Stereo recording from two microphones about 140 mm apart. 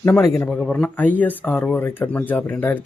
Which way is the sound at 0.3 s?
10° left (ahead or behind).